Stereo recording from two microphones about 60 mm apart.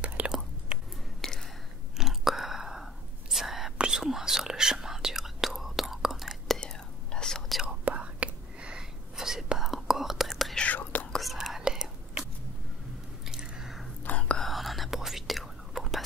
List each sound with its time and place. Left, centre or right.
0.2 s whispering: right
1.2 s whispering: centre
2.0 s whispering: centre
7.6 s whispering: right; by 10.3 s centre
10.3 s whispering: centre
10.6 s whispering: left
11.3 s whispering: centre
13.3 s biting: centre
14.0 s whispering: left
14.4 s whispering: centre